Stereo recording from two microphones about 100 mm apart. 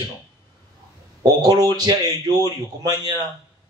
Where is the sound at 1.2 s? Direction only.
40° right (ahead or behind).